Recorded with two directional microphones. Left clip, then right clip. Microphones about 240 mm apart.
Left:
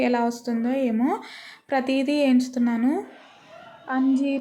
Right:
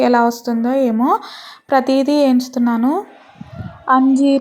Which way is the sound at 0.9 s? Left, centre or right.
Centre.